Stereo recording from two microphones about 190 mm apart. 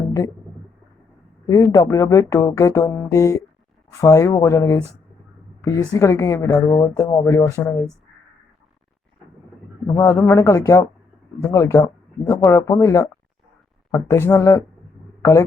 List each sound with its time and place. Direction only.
1.5 s speech: 15° left (ahead or behind)
9.8 s speech: 15° left (ahead or behind)